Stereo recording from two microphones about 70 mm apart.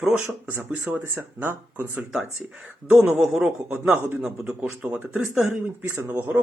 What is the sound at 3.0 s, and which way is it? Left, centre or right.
Speech, centre.